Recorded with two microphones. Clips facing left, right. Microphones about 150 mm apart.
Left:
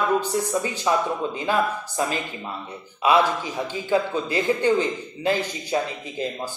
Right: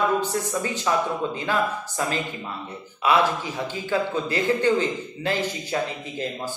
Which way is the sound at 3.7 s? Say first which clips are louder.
Left 3 dB; 15° left (ahead or behind).